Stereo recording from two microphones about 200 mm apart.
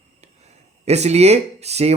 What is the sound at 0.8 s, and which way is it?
A man's voice, 35° right (ahead or behind).